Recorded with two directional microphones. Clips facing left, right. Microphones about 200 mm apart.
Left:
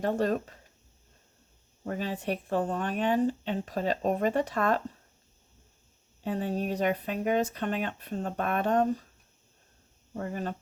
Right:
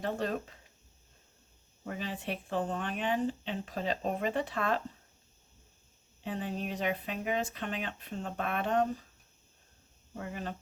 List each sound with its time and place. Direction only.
0.0 s speech: 45° left (ahead or behind)
1.8 s speech: 40° left (ahead or behind)
6.2 s speech: 40° left (ahead or behind)
10.2 s speech: 40° left (ahead or behind)